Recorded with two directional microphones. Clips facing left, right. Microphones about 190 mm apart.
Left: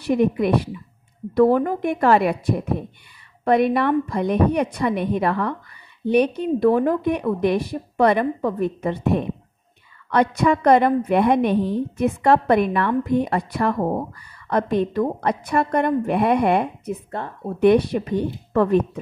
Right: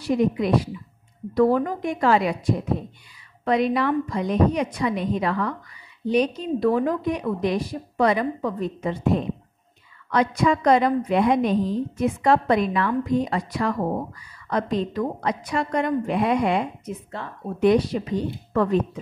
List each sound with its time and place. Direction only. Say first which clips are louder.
0.0 s a woman's voice: left 3 dB; 60° left (ahead or behind)